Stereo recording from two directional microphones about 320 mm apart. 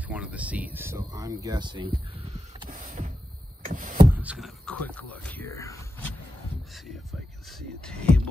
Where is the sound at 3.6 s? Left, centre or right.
Right.